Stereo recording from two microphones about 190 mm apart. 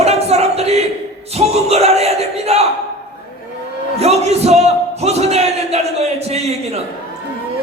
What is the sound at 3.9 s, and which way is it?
Speech, 35° right (ahead or behind).